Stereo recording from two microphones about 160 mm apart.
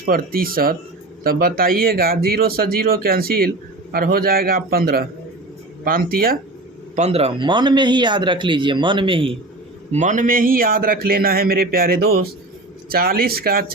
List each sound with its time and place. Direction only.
0.0 s speech: 65° right (ahead or behind)
6.9 s speech: 40° right (ahead or behind)
9.9 s speech: 50° right (ahead or behind); by 13.7 s 70° right (ahead or behind)